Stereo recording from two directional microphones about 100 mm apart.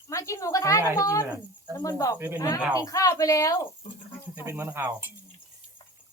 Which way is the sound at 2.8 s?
35° left (ahead or behind).